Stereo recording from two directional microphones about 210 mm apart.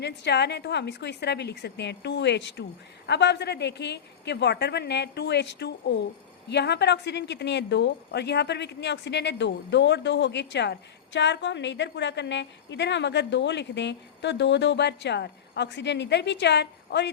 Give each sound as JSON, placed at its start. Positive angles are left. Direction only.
{"t": 0.0, "sound": "a woman's voice", "side_deg": 55}